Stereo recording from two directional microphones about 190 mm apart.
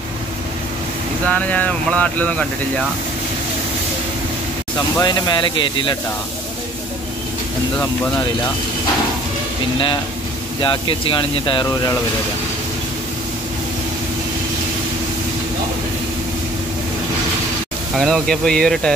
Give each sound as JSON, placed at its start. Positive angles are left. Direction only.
{"t": 1.2, "sound": "speech", "side_deg": 5}
{"t": 4.7, "sound": "speech", "side_deg": 20}
{"t": 7.8, "sound": "speech", "side_deg": 15}
{"t": 10.6, "sound": "speech", "side_deg": 25}
{"t": 17.9, "sound": "speech", "side_deg": 0}